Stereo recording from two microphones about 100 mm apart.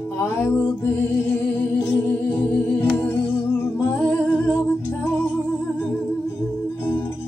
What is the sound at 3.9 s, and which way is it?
Music, 25° left (ahead or behind).